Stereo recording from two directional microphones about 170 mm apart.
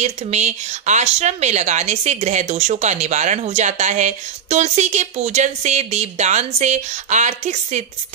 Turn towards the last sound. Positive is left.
turn(degrees=-45)  # may be behind; listen again after turning